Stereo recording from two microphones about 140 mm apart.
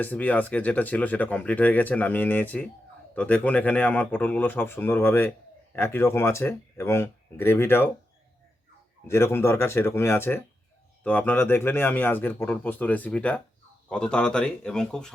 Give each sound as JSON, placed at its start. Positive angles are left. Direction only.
{"t": 0.0, "sound": "speech", "side_deg": 10}
{"t": 9.0, "sound": "speech", "side_deg": 20}